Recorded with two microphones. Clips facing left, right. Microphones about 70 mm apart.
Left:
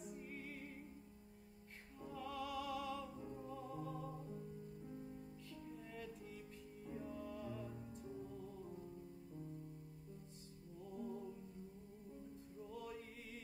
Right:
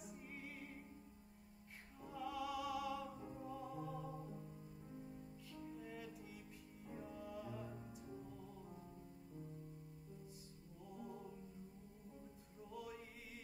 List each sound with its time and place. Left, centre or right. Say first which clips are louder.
2.0 s music: right 1 dB; centre
5.5 s music: right 3 dB; centre
11.0 s music: left 5 dB; centre